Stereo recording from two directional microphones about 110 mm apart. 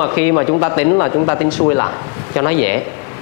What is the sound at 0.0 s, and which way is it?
A man's voice, 25° left (ahead or behind).